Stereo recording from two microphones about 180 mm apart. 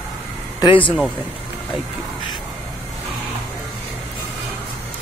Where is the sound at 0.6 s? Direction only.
30° left (ahead or behind).